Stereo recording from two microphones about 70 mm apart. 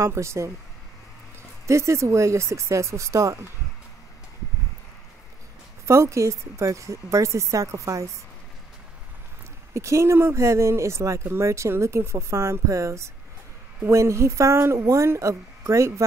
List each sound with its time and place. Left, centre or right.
0.0 s speech: right
1.7 s speech: right
5.9 s speech: right
9.8 s speech: right